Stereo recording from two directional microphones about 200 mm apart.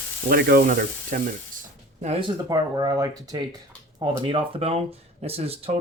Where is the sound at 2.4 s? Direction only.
20° right (ahead or behind).